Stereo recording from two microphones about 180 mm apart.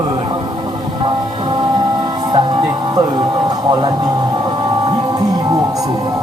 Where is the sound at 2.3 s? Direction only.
20° right (ahead or behind).